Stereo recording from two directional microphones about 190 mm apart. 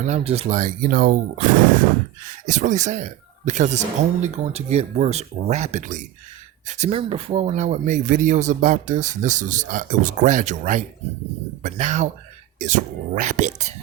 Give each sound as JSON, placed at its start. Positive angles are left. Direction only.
{"t": 0.1, "sound": "speech", "side_deg": -35}